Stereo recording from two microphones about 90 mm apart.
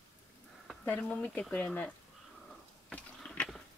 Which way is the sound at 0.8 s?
15° left (ahead or behind).